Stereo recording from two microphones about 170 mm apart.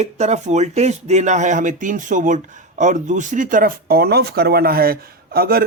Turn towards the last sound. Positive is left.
turn(degrees=-60)  # may be behind; listen again after turning